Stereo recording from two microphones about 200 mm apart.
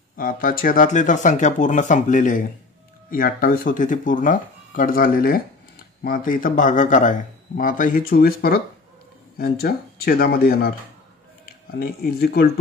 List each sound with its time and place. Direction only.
0.1 s a man's voice: 45° left (ahead or behind)
11.8 s a man's voice: 50° left (ahead or behind)